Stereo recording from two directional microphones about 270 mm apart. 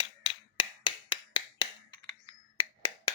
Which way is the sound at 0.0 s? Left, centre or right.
Centre.